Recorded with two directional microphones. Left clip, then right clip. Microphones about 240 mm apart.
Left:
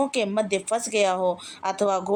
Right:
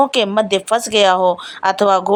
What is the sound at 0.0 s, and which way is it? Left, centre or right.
A woman's voice, centre.